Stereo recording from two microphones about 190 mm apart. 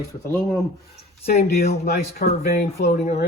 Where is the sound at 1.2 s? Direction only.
35° left (ahead or behind).